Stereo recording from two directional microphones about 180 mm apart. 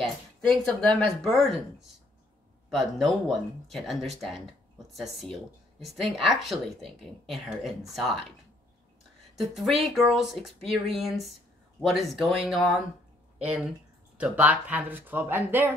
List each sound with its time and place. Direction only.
0.0 s speech: centre (ahead or behind)
9.4 s speech: centre (ahead or behind)